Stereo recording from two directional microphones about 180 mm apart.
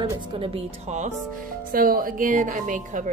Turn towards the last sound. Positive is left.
turn(degrees=-45)  # may be behind; listen again after turning